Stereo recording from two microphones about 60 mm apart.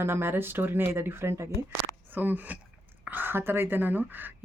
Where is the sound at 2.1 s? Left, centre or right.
Right.